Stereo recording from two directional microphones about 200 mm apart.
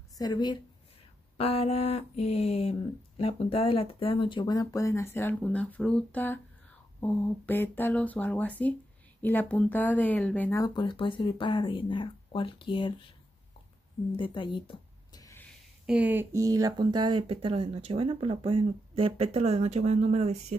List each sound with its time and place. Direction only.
0.2 s speech: 20° left (ahead or behind)
14.1 s a sound: 25° left (ahead or behind)
15.9 s speech: 10° right (ahead or behind); by 20.5 s 35° right (ahead or behind)